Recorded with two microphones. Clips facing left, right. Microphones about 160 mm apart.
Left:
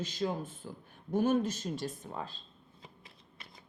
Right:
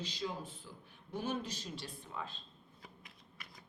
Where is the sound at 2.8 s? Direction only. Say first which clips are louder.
Left 2 dB; 30° left (ahead or behind).